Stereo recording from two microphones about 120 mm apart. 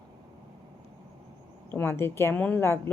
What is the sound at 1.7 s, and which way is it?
Speech, 20° left (ahead or behind).